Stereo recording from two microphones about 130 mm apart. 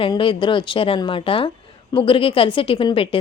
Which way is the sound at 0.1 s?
40° left (ahead or behind).